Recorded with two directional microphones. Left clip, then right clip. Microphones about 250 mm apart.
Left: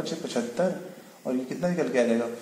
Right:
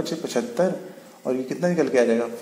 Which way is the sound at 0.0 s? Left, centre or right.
Right.